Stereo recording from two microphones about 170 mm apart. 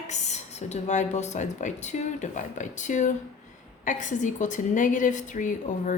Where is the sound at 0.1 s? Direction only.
40° left (ahead or behind).